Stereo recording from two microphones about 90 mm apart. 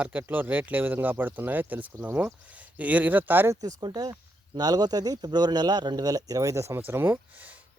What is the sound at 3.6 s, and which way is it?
Speech, 45° right (ahead or behind).